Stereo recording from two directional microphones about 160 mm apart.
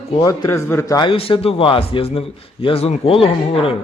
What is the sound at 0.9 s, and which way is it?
A man's voice, 35° left (ahead or behind).